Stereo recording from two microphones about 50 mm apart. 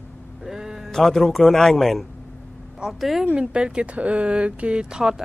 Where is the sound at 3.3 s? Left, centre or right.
Centre.